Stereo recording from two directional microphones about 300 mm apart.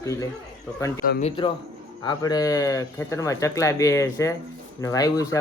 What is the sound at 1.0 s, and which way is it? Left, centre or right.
Speech, left.